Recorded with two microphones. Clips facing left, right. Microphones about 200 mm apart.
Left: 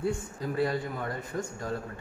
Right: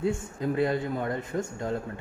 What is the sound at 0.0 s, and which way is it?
A man's voice, 20° right (ahead or behind).